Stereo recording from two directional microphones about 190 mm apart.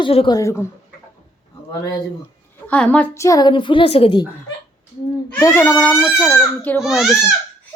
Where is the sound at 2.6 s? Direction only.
5° left (ahead or behind); by 4.3 s 25° left (ahead or behind).